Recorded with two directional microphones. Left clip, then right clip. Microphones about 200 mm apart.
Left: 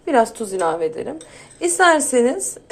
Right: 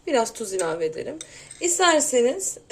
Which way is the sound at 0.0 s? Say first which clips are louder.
Left 6 dB; 10° right (ahead or behind).